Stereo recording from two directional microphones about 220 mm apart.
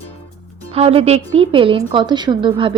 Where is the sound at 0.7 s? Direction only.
25° right (ahead or behind).